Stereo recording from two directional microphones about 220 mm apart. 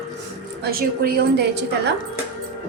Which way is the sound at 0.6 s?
45° right (ahead or behind).